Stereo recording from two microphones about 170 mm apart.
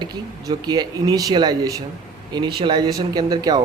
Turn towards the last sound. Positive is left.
turn(degrees=-25)  # may be behind; listen again after turning